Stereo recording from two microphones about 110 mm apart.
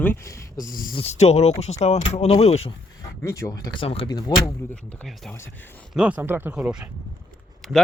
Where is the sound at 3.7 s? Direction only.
55° left (ahead or behind).